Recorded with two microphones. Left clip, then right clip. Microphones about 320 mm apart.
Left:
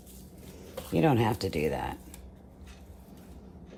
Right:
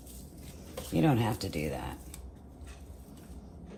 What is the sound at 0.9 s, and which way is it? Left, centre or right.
Speech, left.